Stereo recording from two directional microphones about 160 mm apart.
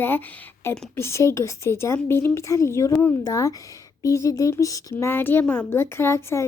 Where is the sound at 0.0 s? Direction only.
10° left (ahead or behind).